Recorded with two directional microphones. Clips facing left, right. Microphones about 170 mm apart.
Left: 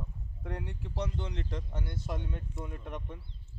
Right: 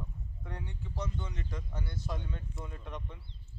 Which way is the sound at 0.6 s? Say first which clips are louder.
Even; 70° left (ahead or behind).